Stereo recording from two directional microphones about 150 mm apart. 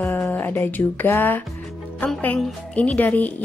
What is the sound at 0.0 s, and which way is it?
A woman's voice, 15° left (ahead or behind).